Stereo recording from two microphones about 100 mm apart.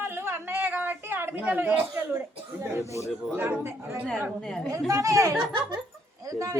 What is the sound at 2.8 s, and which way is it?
Speech, 30° left (ahead or behind).